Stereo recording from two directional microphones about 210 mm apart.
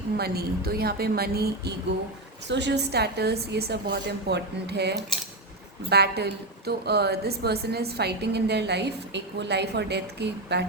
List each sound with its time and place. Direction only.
0.2 s a woman's voice: 45° right (ahead or behind)